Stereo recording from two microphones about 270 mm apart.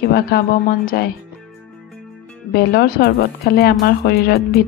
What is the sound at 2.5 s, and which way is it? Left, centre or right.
Speech, left.